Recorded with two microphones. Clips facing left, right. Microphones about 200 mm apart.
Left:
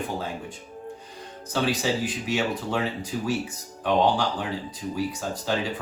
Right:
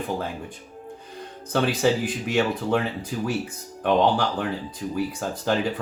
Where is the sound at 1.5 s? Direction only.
60° right (ahead or behind).